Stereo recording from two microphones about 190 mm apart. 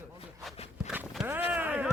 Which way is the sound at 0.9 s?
10° right (ahead or behind).